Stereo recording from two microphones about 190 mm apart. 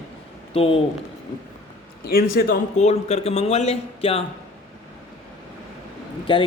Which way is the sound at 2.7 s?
35° left (ahead or behind).